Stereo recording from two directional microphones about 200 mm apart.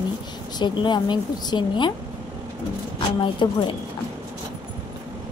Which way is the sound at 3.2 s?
25° left (ahead or behind).